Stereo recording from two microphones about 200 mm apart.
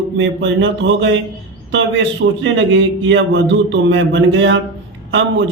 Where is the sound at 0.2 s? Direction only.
65° right (ahead or behind).